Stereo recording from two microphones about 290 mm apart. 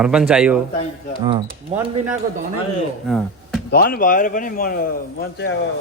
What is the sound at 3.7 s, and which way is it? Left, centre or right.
Speech, left.